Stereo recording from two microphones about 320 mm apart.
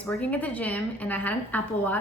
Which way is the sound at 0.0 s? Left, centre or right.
Centre.